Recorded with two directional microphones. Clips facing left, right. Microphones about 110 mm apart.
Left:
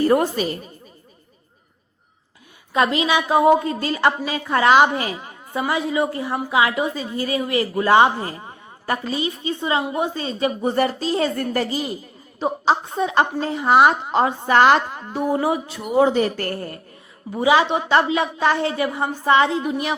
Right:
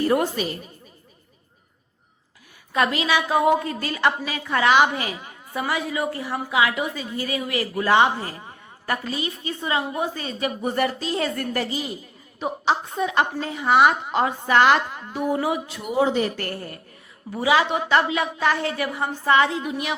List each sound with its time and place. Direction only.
0.1 s a woman's voice: 40° left (ahead or behind)
2.7 s a woman's voice: 25° left (ahead or behind)
15.9 s a woman's voice: 45° left (ahead or behind)
17.3 s a woman's voice: 25° left (ahead or behind)
19.6 s a woman's voice: 35° left (ahead or behind)